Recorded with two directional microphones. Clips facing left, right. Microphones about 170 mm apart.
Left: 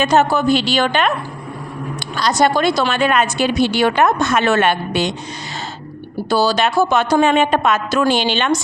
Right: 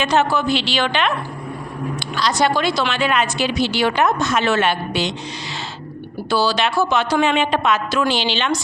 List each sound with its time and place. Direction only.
0.0 s a woman's voice: 45° left (ahead or behind)
2.1 s a woman's voice: 45° left (ahead or behind)
6.3 s a woman's voice: 45° left (ahead or behind)